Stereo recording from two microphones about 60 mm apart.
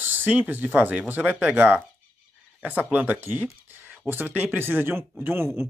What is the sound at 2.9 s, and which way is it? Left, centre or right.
Speech, right.